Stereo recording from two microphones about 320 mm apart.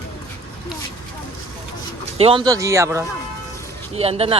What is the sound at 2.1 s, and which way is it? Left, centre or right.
Speech, centre.